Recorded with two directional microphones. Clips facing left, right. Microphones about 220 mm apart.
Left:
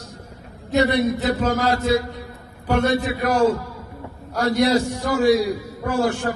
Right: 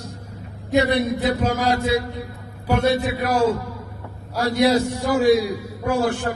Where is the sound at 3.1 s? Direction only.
10° right (ahead or behind).